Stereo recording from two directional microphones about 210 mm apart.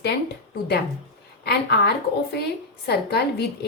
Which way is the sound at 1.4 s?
50° left (ahead or behind).